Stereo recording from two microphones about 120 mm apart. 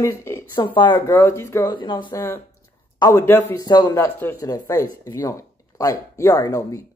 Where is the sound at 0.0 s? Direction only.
25° left (ahead or behind).